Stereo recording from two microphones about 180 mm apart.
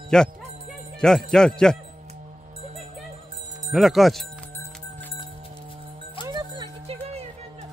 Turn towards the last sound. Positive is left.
turn(degrees=-35)  # may be behind; listen again after turning